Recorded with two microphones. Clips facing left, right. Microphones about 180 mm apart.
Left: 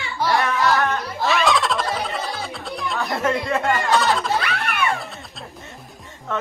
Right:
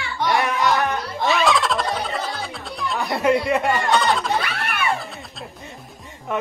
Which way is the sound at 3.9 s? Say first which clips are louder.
Even; centre (ahead or behind).